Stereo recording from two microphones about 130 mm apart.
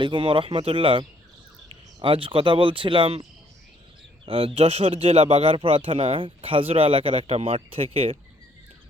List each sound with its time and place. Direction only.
0.0 s speech: 40° right (ahead or behind)
4.3 s speech: 45° right (ahead or behind)